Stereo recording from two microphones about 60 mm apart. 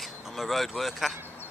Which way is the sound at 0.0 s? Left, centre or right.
Centre.